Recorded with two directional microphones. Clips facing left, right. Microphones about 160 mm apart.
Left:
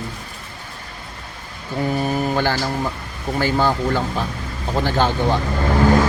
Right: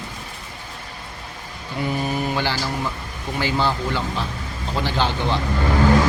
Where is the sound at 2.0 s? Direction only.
45° left (ahead or behind).